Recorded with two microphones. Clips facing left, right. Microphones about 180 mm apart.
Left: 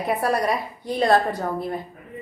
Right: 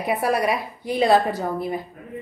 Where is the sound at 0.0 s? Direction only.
Centre (ahead or behind).